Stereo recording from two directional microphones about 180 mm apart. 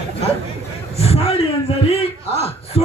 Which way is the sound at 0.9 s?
35° left (ahead or behind).